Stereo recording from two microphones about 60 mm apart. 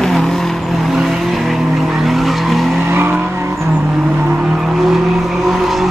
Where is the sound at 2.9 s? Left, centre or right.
Right.